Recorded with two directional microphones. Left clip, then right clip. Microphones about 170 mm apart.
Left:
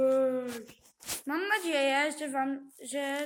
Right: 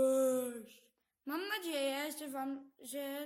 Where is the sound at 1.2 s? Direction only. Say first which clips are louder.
Left 9 dB; 30° right (ahead or behind).